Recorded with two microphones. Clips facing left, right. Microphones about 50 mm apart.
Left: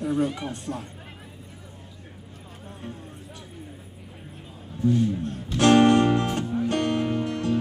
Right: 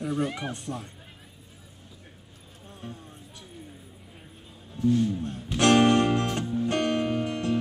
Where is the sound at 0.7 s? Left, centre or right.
Left.